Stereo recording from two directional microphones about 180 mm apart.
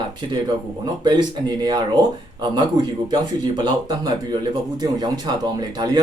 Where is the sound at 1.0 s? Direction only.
25° right (ahead or behind).